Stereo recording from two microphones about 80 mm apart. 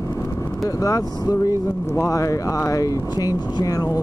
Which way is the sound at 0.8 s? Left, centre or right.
Left.